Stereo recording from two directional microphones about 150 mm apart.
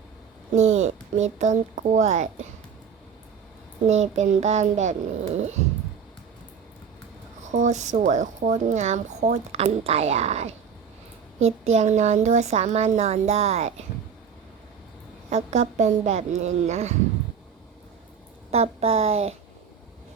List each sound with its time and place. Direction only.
0.5 s speech: 50° right (ahead or behind)
3.8 s speech: 50° right (ahead or behind)
7.5 s speech: 55° right (ahead or behind)
15.3 s speech: 50° right (ahead or behind)
18.5 s speech: 45° right (ahead or behind)